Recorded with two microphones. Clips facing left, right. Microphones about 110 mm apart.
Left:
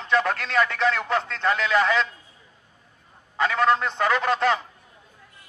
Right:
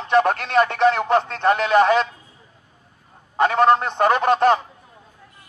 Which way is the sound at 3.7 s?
55° right (ahead or behind).